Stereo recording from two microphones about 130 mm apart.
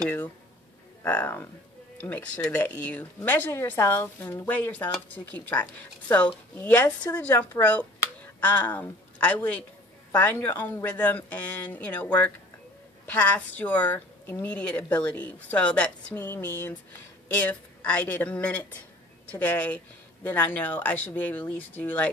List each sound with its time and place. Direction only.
1.0 s a woman's voice: 15° left (ahead or behind)